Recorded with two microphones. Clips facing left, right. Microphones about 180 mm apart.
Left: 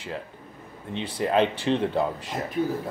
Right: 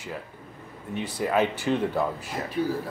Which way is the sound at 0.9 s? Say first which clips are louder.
Left 2 dB; 25° left (ahead or behind).